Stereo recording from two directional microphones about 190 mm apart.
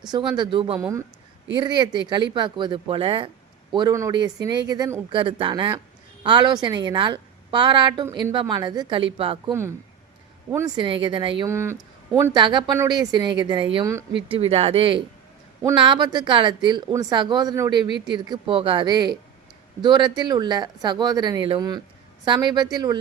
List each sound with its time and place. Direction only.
0.3 s speech: 25° right (ahead or behind)
0.8 s speech: 15° right (ahead or behind); by 9.4 s 30° right (ahead or behind)
9.5 s speech: 15° right (ahead or behind)
10.8 s speech: 25° right (ahead or behind)
11.4 s speech: 15° right (ahead or behind)